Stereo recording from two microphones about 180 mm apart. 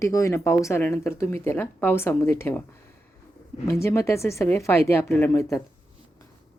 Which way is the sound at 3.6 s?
15° left (ahead or behind).